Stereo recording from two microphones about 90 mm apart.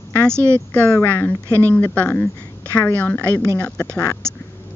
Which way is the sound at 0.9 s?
25° left (ahead or behind).